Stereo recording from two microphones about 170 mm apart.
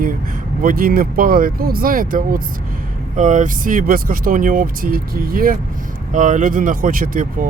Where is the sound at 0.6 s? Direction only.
55° right (ahead or behind).